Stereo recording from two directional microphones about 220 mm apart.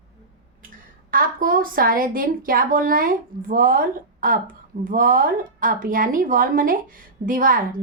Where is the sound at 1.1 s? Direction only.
40° right (ahead or behind).